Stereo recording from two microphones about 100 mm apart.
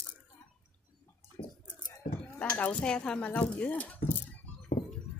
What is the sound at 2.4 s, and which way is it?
Speech, 15° left (ahead or behind).